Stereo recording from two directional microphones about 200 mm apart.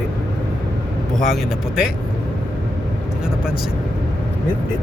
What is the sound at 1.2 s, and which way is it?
Speech, centre (ahead or behind).